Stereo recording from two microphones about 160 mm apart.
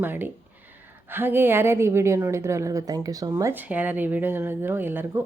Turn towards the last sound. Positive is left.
turn(degrees=-15)  # may be behind; listen again after turning